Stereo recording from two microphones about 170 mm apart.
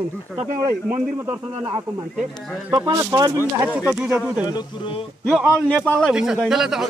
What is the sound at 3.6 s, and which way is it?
Speech, 10° right (ahead or behind).